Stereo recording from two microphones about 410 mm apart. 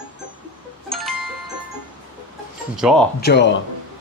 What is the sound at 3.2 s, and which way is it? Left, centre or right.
Speech, left.